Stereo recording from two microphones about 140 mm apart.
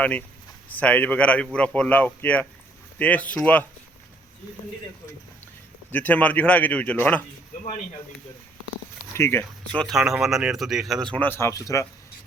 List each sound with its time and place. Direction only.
0.0 s a man's voice: 10° left (ahead or behind)
5.9 s a man's voice: 10° left (ahead or behind)
9.1 s speech: 20° left (ahead or behind); by 11.1 s centre (ahead or behind)
11.1 s speech: 15° left (ahead or behind)